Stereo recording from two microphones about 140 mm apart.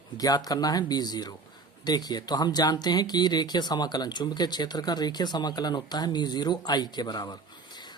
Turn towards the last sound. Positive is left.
turn(degrees=30)  # may be behind; listen again after turning